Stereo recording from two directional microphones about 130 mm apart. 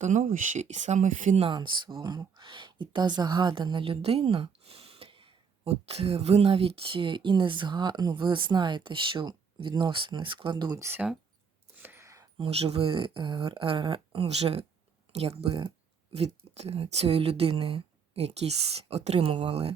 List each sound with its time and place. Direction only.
0.0 s speech: 75° right (ahead or behind)
1.4 s speech: 40° right (ahead or behind)
10.8 s speech: 20° right (ahead or behind)
11.8 s a sound: 15° right (ahead or behind)
12.4 s speech: 50° right (ahead or behind)